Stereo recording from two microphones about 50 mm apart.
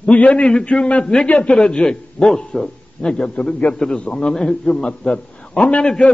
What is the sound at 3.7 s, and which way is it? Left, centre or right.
A man's voice, centre.